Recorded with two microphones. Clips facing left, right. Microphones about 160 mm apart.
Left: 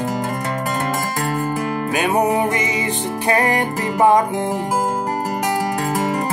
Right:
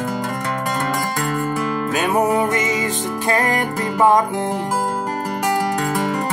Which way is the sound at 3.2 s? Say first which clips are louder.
Left 2 dB; 15° left (ahead or behind).